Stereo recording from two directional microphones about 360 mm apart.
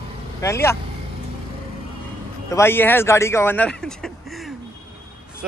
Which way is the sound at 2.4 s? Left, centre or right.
Centre.